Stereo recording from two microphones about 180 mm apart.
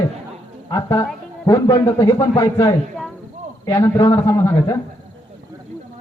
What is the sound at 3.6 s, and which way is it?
A man's voice, 15° left (ahead or behind).